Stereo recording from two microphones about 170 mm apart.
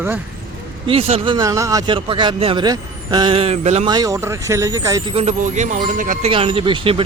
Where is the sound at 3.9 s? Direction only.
20° right (ahead or behind).